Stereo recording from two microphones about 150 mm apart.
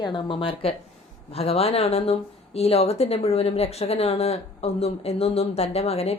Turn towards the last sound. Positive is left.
turn(degrees=45)  # may be behind; listen again after turning